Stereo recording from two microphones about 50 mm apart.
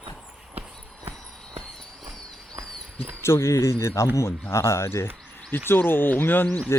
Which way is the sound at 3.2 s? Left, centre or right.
Left.